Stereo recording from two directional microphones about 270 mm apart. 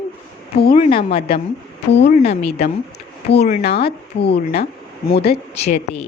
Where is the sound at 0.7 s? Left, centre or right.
Centre.